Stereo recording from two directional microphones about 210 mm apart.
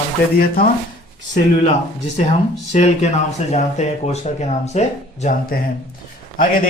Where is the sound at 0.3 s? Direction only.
45° left (ahead or behind).